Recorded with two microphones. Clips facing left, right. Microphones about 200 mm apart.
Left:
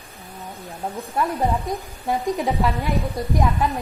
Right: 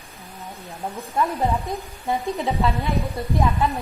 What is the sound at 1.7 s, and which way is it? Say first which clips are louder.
A woman's voice: left 1 dB; 15° left (ahead or behind).